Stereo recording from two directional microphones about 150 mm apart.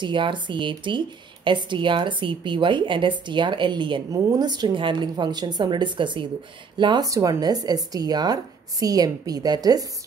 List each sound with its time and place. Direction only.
0.0 s speech: 30° right (ahead or behind)